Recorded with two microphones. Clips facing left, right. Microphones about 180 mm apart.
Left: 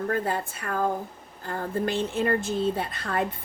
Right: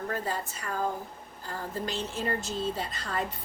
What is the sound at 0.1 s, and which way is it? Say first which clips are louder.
Speech: left 5 dB; 55° left (ahead or behind).